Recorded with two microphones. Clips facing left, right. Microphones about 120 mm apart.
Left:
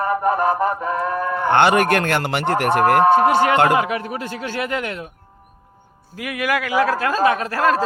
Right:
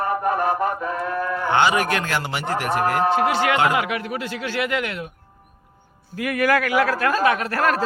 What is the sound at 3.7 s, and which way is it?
A man's voice, 30° left (ahead or behind).